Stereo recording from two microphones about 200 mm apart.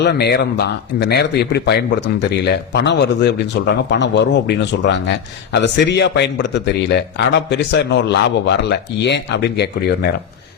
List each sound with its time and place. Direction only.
0.0 s speech: 55° left (ahead or behind)